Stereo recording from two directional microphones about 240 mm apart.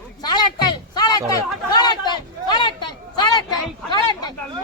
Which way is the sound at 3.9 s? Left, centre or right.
Centre.